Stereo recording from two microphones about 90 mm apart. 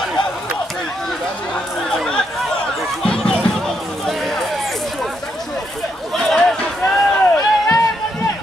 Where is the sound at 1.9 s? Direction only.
5° left (ahead or behind).